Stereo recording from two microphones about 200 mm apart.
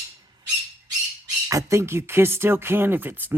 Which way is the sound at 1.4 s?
15° right (ahead or behind).